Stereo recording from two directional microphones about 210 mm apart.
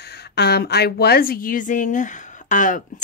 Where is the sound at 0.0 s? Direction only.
50° left (ahead or behind).